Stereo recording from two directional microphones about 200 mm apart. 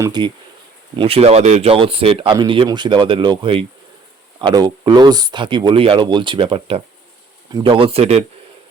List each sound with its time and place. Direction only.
0.0 s speech: 20° right (ahead or behind)